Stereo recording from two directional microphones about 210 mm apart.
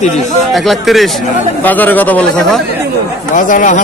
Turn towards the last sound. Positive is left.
turn(degrees=40)  # may be behind; listen again after turning